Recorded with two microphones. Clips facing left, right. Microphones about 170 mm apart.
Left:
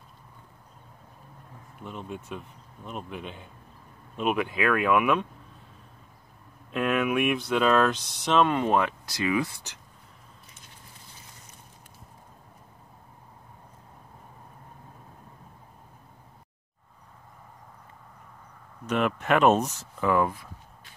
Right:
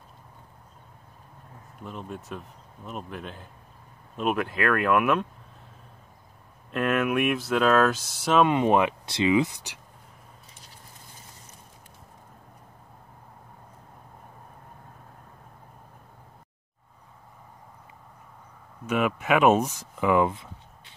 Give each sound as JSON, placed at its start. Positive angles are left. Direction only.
{"t": 1.8, "sound": "speech", "side_deg": 0}
{"t": 6.7, "sound": "speech", "side_deg": 0}
{"t": 18.9, "sound": "speech", "side_deg": -5}